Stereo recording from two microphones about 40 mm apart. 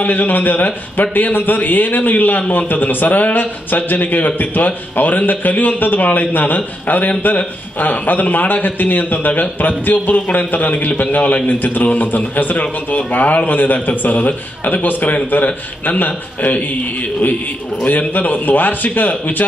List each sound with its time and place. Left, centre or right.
0.0 s a man's voice: left
17.8 s a man's voice: left